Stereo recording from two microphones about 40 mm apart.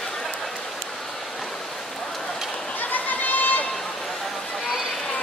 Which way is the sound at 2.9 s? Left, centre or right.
Left.